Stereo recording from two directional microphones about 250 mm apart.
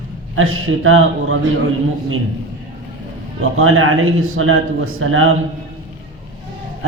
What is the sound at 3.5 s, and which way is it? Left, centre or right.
A man's voice, right.